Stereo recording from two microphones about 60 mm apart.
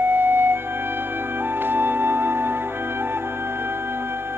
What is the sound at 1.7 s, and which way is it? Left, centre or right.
Music, right.